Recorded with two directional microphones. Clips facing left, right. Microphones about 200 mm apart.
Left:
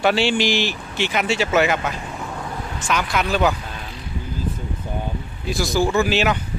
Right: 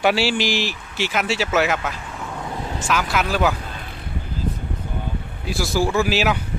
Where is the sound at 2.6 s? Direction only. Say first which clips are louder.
Right 3 dB; 25° right (ahead or behind).